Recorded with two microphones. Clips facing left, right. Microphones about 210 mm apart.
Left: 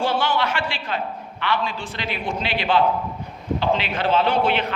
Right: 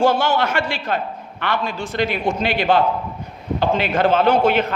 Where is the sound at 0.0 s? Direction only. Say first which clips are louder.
Right 5 dB; 45° right (ahead or behind).